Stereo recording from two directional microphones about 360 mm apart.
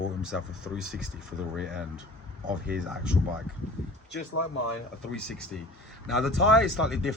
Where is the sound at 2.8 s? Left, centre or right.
Centre.